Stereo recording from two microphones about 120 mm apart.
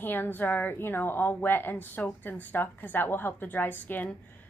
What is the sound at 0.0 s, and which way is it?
A woman's voice, 15° left (ahead or behind).